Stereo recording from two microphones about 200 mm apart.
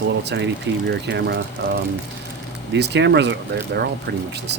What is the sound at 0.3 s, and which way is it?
Speech, 60° right (ahead or behind).